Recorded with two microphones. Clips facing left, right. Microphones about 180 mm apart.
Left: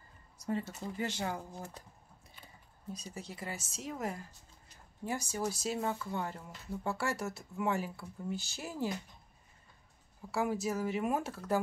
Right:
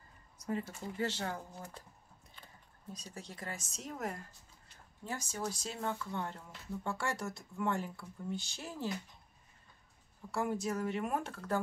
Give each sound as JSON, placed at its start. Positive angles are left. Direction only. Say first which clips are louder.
{"t": 0.5, "sound": "speech", "louder": "left 2 dB", "side_deg": 30}
{"t": 1.0, "sound": "speech", "louder": "even", "side_deg": 15}
{"t": 5.0, "sound": "speech", "louder": "left 4 dB", "side_deg": 10}
{"t": 10.3, "sound": "speech", "louder": "left 2 dB", "side_deg": 5}